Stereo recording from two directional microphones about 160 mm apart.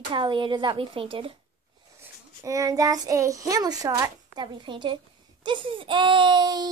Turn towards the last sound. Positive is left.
turn(degrees=-25)  # may be behind; listen again after turning